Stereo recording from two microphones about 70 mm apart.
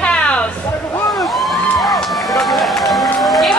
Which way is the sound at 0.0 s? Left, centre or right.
Centre.